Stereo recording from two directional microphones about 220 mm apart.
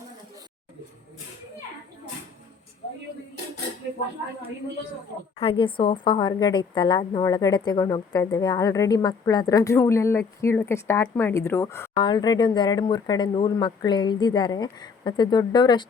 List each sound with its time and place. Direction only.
5.4 s a woman's voice: 25° left (ahead or behind)